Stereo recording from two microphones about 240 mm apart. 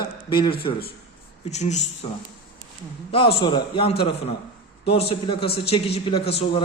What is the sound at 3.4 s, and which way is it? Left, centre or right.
A man's voice, centre.